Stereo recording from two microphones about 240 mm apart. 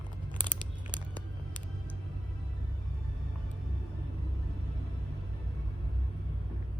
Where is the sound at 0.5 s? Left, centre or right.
Centre.